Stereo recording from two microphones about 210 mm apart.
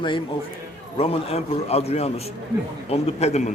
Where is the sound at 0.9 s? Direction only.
30° left (ahead or behind).